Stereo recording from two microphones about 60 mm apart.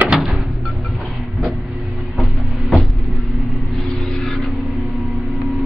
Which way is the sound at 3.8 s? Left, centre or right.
Centre.